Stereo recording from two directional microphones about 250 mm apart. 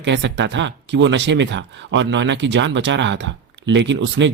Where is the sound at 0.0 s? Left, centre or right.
Right.